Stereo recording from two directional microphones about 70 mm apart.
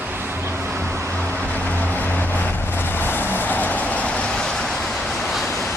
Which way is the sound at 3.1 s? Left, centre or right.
Left.